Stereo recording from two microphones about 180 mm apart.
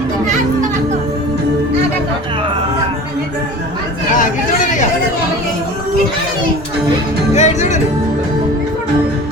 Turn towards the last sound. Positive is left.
turn(degrees=40)  # may be behind; listen again after turning